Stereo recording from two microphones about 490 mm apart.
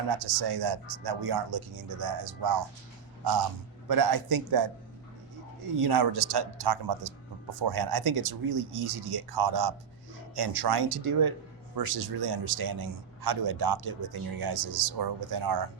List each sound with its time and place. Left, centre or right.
0.2 s a man's voice: right
3.8 s a man's voice: right
5.8 s a man's voice: right